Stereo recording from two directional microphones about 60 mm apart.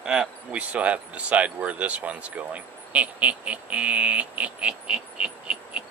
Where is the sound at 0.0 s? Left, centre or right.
Centre.